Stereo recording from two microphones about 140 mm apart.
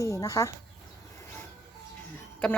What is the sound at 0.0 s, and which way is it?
Speech, 25° left (ahead or behind).